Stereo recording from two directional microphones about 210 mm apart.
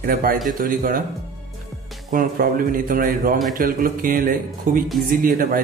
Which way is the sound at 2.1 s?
40° right (ahead or behind).